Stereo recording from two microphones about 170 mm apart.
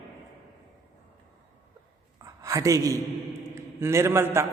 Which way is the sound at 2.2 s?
20° right (ahead or behind).